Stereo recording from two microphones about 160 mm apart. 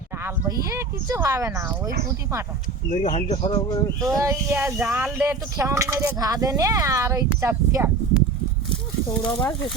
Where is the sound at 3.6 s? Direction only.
25° left (ahead or behind).